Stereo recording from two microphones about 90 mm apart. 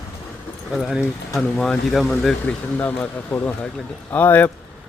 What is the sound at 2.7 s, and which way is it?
Speech, 20° left (ahead or behind).